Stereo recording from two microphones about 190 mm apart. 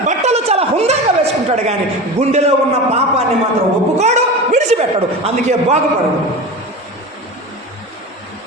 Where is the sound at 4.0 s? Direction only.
35° right (ahead or behind).